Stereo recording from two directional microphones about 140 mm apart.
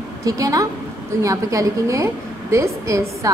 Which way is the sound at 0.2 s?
25° right (ahead or behind).